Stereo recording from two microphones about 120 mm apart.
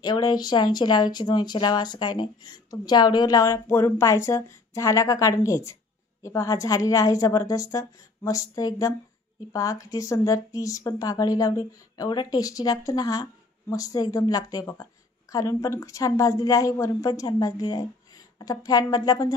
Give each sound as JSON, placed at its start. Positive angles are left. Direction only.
{"t": 0.0, "sound": "speech", "side_deg": 35}